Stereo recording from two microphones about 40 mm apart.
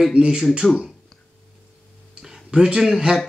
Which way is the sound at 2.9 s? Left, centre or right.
Centre.